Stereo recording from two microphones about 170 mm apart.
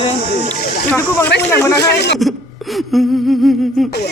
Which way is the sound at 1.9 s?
75° left (ahead or behind).